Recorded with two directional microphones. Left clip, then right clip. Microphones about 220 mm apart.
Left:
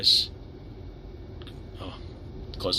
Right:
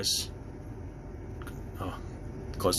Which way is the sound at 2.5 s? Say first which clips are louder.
Left 1 dB; 30° right (ahead or behind).